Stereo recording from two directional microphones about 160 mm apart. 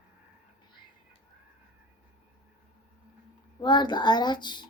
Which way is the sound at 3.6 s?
30° left (ahead or behind).